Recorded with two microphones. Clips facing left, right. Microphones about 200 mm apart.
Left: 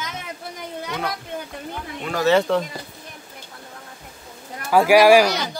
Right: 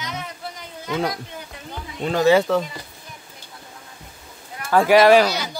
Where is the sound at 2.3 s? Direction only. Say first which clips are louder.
Right 1 dB; 5° right (ahead or behind).